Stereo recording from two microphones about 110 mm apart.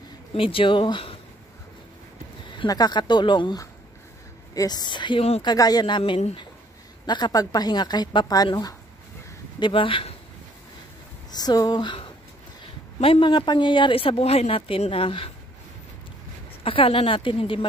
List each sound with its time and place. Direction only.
0.3 s speech: 55° left (ahead or behind)
2.4 s a woman's voice: 45° left (ahead or behind)
9.6 s speech: 50° left (ahead or behind)
11.3 s a woman's voice: 35° left (ahead or behind); by 15.3 s 55° left (ahead or behind)
16.6 s speech: 55° left (ahead or behind)